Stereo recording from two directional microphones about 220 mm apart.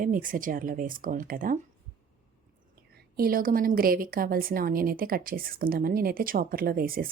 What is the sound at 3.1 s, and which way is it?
A woman's voice, 40° right (ahead or behind).